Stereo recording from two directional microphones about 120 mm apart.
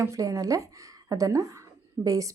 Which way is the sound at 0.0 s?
25° right (ahead or behind).